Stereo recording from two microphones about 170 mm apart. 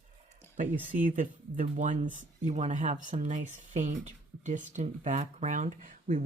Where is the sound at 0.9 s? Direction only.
50° right (ahead or behind).